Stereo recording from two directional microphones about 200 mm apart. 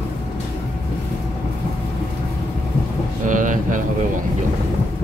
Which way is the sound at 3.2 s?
40° right (ahead or behind).